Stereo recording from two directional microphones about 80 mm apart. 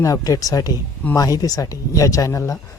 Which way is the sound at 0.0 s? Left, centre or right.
Left.